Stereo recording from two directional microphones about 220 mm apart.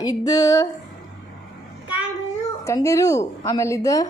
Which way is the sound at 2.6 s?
15° left (ahead or behind).